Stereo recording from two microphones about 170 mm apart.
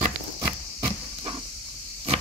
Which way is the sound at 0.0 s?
25° right (ahead or behind).